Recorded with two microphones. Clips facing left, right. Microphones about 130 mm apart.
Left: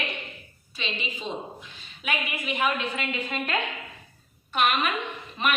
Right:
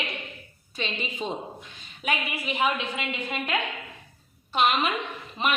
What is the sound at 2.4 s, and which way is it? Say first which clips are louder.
Speech: right 1 dB; 30° right (ahead or behind).